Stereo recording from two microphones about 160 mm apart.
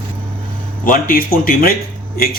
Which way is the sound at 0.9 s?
60° left (ahead or behind).